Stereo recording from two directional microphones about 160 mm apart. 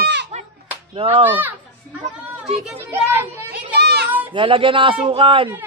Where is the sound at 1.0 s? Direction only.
35° right (ahead or behind).